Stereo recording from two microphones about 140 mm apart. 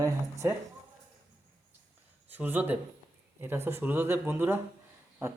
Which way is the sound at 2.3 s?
15° right (ahead or behind).